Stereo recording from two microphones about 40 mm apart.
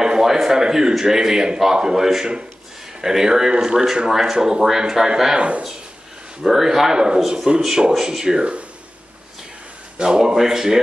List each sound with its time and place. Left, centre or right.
0.0 s a man's voice: centre
6.4 s a man's voice: centre
9.9 s a man's voice: centre